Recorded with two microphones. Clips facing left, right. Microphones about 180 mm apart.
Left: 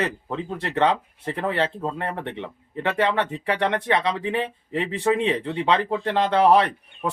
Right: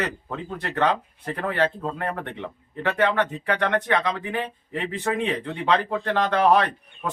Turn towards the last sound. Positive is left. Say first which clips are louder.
# left 2 dB
turn(degrees=25)  # may be behind; listen again after turning